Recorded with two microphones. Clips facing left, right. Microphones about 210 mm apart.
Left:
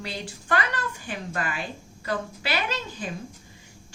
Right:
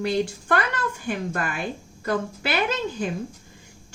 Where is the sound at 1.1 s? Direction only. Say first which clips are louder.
Right 5 dB; 50° right (ahead or behind).